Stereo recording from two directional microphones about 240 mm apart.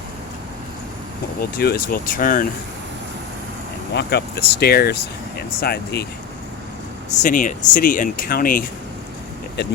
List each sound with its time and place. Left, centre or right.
1.4 s speech: left
3.9 s speech: left
7.1 s speech: left